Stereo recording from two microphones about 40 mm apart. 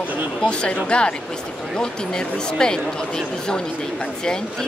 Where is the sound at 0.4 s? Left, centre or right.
Left.